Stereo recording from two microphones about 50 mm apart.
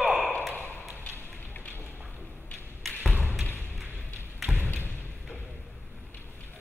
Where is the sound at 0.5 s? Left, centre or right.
Left.